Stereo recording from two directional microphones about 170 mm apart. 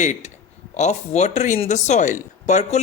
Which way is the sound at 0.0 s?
45° left (ahead or behind).